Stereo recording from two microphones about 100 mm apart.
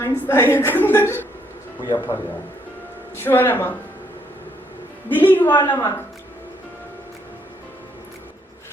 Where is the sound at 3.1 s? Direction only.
25° left (ahead or behind).